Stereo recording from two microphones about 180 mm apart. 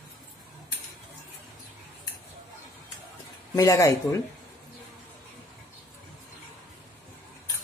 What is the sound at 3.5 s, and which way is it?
Speech, 20° left (ahead or behind).